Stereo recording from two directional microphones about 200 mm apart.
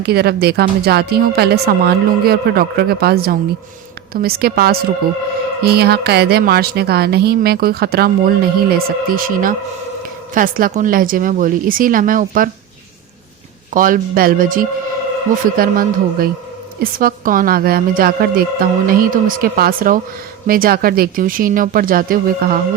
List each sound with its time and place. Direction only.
0.0 s a woman's voice: 55° right (ahead or behind)
13.7 s a woman's voice: 45° right (ahead or behind)